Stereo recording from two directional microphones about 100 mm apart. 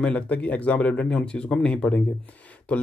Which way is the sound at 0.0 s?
15° left (ahead or behind).